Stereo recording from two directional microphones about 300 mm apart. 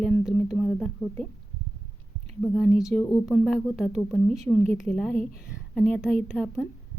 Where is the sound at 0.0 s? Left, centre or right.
Centre.